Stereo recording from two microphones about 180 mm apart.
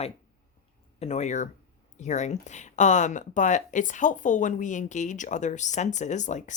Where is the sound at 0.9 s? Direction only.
35° left (ahead or behind).